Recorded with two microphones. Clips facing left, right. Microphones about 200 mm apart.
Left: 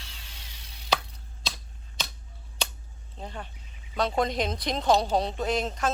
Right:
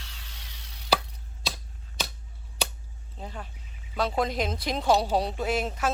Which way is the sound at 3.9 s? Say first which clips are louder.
Left 1 dB; 5° right (ahead or behind).